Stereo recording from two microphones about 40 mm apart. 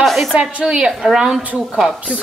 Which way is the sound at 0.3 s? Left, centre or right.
Right.